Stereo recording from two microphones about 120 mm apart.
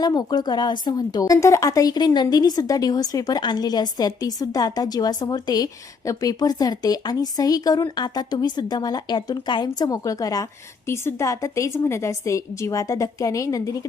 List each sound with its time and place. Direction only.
0.0 s a woman's voice: 35° left (ahead or behind)